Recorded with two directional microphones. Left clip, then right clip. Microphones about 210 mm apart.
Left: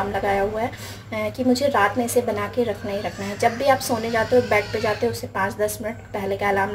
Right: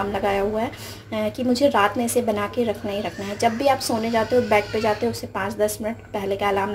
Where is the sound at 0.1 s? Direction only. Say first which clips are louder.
Even; 20° right (ahead or behind).